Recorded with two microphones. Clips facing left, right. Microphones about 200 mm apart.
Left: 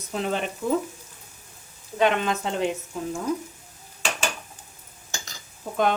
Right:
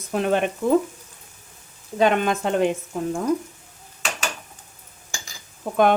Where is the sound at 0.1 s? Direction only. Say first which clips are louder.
Right 6 dB; 55° right (ahead or behind).